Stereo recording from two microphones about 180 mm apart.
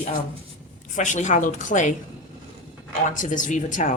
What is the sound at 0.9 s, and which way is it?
Speech, 45° left (ahead or behind).